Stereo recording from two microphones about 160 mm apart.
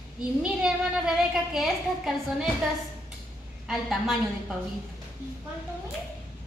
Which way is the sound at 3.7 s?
Centre (ahead or behind).